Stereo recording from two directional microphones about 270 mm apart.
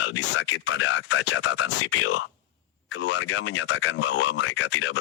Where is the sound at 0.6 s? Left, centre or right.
Left.